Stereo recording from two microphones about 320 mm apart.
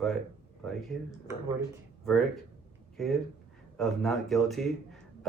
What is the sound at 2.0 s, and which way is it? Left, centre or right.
Speech, centre.